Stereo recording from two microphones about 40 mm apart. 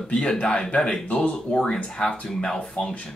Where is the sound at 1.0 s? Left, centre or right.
Left.